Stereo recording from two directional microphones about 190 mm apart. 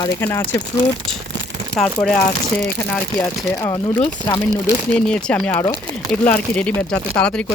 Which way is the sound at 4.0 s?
25° left (ahead or behind).